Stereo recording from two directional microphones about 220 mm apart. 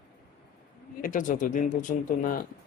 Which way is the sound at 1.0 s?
35° left (ahead or behind).